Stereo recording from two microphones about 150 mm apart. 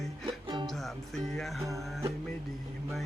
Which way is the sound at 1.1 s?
Centre (ahead or behind).